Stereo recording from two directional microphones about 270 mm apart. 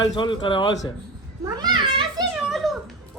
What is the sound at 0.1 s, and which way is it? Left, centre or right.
Speech, centre.